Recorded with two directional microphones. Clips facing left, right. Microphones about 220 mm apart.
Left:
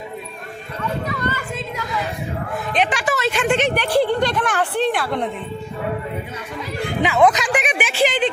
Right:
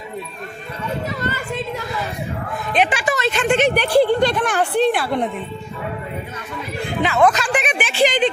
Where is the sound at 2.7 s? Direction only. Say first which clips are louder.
Right 2 dB; 5° right (ahead or behind).